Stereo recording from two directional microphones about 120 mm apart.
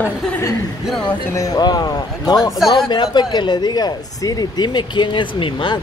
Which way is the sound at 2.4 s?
5° right (ahead or behind).